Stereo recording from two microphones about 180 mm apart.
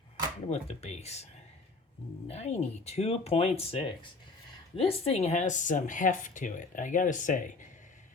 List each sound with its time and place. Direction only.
0.5 s speech: 40° left (ahead or behind)
2.2 s speech: 40° left (ahead or behind)